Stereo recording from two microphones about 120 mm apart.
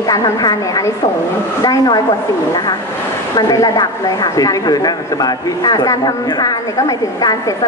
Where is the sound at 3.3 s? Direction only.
35° left (ahead or behind).